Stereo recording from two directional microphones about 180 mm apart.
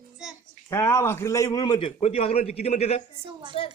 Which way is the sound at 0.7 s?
15° left (ahead or behind).